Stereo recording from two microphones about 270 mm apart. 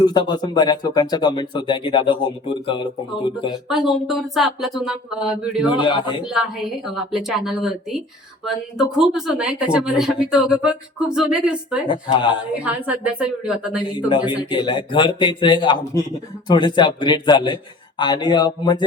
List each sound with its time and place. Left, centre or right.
0.0 s speech: centre
3.7 s speech: centre
5.7 s speech: centre
6.2 s speech: centre
9.0 s speech: centre
11.9 s speech: centre
12.6 s speech: centre
14.3 s speech: centre